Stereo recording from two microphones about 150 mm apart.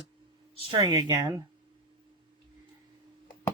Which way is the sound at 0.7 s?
25° right (ahead or behind).